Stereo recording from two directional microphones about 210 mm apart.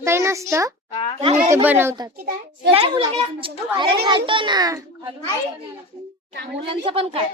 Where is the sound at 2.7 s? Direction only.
25° right (ahead or behind).